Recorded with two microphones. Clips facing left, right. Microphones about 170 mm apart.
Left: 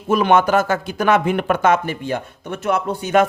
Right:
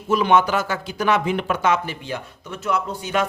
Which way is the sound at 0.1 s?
55° left (ahead or behind).